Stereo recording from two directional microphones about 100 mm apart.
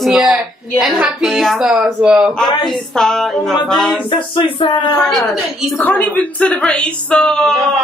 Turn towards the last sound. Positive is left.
turn(degrees=5)  # may be behind; listen again after turning